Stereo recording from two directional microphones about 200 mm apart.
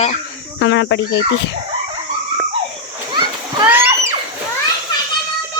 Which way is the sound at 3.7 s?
10° right (ahead or behind).